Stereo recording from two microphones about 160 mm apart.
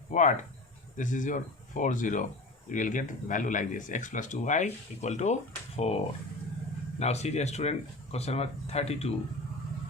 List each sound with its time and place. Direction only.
0.1 s speech: 50° left (ahead or behind)
7.0 s speech: 45° left (ahead or behind)